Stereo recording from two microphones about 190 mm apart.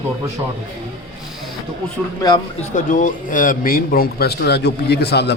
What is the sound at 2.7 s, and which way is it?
A man's voice, 45° left (ahead or behind).